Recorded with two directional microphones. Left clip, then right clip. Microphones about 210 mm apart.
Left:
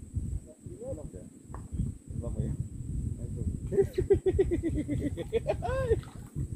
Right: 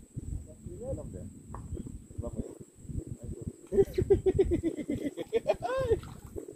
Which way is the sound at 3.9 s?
15° left (ahead or behind).